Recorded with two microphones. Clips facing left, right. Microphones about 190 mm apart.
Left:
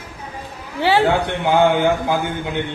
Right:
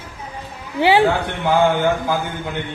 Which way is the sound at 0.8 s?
15° right (ahead or behind).